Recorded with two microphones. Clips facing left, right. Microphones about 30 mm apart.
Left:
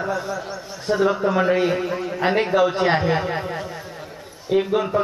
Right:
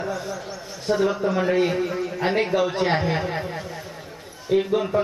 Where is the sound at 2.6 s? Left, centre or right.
Left.